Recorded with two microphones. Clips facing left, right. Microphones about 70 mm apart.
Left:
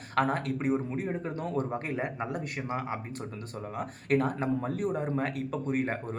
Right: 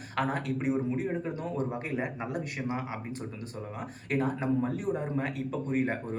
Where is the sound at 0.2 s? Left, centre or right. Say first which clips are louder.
Left 2 dB; left.